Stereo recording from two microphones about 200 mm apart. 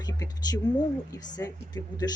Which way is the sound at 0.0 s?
20° left (ahead or behind).